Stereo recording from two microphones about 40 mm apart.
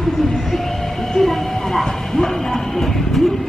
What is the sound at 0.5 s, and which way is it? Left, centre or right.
Train, centre.